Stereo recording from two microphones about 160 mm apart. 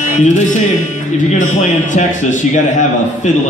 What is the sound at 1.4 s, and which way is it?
Speech, 50° left (ahead or behind).